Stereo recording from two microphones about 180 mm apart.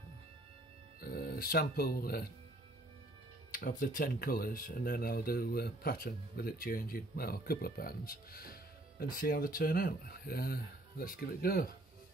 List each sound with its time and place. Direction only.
1.0 s speech: 55° left (ahead or behind)
3.5 s speech: 50° left (ahead or behind)